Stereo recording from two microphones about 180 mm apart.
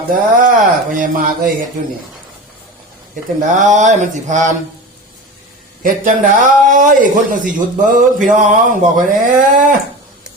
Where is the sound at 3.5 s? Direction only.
45° right (ahead or behind).